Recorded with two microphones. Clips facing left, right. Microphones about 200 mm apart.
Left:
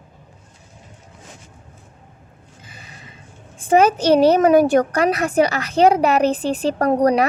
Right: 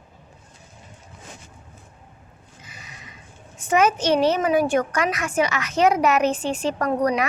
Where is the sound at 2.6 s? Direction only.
30° left (ahead or behind).